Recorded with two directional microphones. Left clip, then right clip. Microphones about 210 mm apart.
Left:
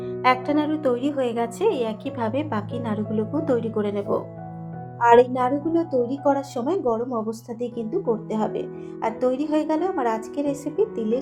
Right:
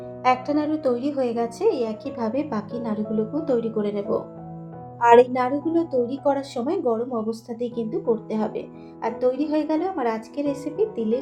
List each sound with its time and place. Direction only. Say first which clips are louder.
0.2 s a woman's voice: left 1 dB; 25° left (ahead or behind)
4.9 s a woman's voice: right 1 dB; centre (ahead or behind)
5.4 s a woman's voice: even; 25° left (ahead or behind)